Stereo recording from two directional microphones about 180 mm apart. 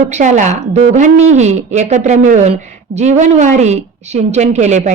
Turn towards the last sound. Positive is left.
turn(degrees=-40)  # may be behind; listen again after turning